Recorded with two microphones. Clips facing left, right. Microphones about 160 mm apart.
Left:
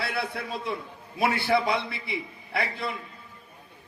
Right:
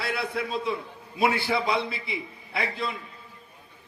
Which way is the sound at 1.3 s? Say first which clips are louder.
Left 1 dB; 55° left (ahead or behind).